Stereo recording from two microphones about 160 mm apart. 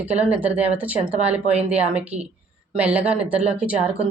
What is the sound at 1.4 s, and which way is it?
Speech, 40° right (ahead or behind).